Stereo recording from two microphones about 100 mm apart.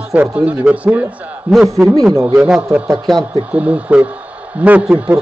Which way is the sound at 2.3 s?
10° right (ahead or behind).